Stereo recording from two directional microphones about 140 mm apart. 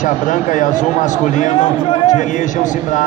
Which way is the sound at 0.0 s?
65° left (ahead or behind).